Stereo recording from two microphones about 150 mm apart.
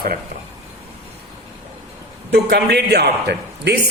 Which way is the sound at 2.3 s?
90° right.